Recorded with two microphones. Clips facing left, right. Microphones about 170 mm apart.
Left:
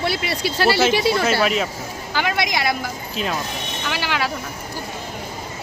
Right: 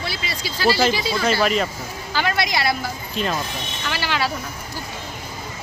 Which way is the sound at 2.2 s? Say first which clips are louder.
Even; 15° left (ahead or behind).